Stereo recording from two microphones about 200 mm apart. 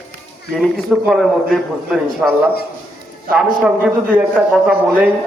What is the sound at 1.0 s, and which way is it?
A man's voice, centre (ahead or behind).